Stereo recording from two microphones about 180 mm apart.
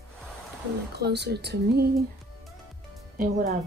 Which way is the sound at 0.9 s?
65° right (ahead or behind).